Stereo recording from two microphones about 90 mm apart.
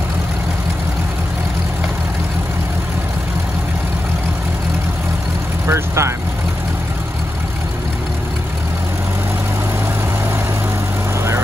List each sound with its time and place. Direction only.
5.7 s vehicle: 30° right (ahead or behind)